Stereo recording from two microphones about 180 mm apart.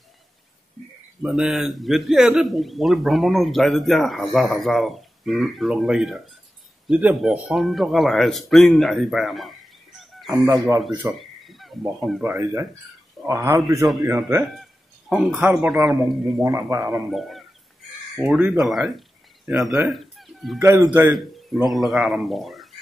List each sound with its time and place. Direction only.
1.2 s a man's voice: 5° right (ahead or behind)
11.0 s a sound: centre (ahead or behind)
12.2 s speech: 15° right (ahead or behind)
14.6 s a sound: centre (ahead or behind)
15.3 s a man's voice: 5° right (ahead or behind)
16.4 s speech: 15° right (ahead or behind)
16.8 s a man's voice: centre (ahead or behind)
20.6 s a man's voice: 15° right (ahead or behind)
21.5 s speech: centre (ahead or behind)